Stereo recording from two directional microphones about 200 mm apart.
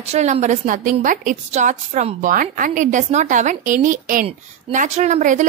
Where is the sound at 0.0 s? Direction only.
35° right (ahead or behind).